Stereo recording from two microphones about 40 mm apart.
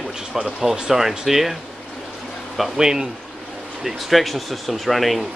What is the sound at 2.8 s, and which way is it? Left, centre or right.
Speech, centre.